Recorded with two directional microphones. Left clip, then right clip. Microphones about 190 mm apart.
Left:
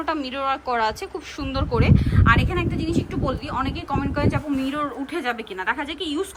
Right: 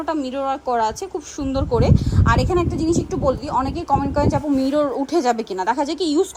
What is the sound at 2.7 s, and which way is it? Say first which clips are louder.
Speech: right 5 dB; centre (ahead or behind).